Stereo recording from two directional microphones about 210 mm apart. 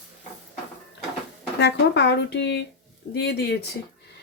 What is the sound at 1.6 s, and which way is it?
Speech, 55° left (ahead or behind).